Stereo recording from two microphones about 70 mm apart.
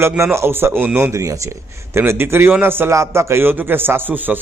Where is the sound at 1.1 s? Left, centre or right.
Right.